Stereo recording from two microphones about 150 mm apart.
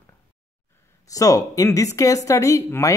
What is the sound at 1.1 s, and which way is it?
Speech, 25° left (ahead or behind).